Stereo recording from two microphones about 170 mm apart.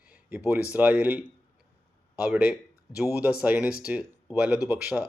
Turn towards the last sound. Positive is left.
turn(degrees=-10)  # may be behind; listen again after turning